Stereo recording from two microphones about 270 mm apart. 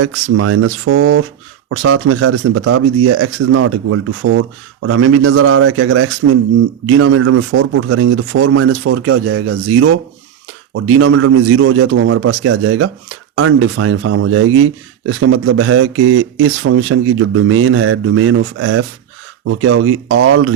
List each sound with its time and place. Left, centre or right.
0.0 s a man's voice: right